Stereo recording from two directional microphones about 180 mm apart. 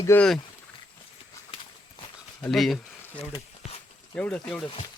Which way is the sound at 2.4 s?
Centre (ahead or behind).